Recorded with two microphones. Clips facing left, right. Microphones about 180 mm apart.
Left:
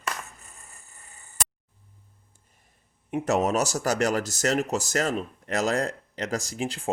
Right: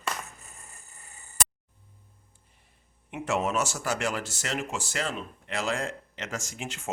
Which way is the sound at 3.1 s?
40° left (ahead or behind).